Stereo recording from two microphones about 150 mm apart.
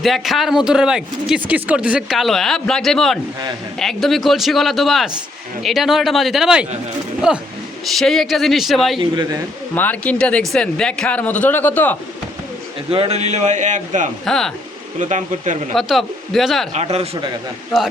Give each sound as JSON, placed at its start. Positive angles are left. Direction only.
{"t": 0.0, "sound": "speech", "side_deg": 0}
{"t": 9.7, "sound": "speech", "side_deg": 10}
{"t": 12.9, "sound": "a man's voice", "side_deg": -40}
{"t": 14.3, "sound": "speech", "side_deg": 5}
{"t": 14.9, "sound": "a man's voice", "side_deg": -55}
{"t": 15.7, "sound": "speech", "side_deg": 0}
{"t": 16.7, "sound": "a man's voice", "side_deg": -45}